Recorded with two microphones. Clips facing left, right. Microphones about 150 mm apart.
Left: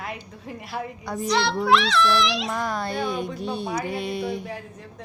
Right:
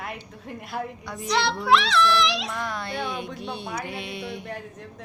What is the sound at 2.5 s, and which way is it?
Speech, 40° left (ahead or behind).